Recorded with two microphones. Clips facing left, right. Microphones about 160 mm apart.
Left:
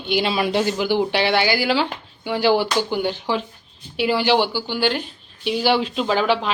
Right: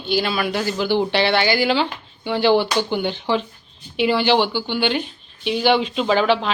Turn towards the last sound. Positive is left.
turn(degrees=10)  # may be behind; listen again after turning